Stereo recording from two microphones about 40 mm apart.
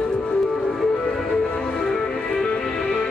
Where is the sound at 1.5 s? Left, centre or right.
Centre.